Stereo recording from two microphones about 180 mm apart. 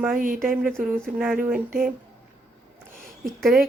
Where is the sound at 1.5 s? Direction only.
50° right (ahead or behind).